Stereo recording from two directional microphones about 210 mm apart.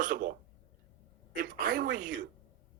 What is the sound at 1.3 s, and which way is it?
Speech, 40° right (ahead or behind).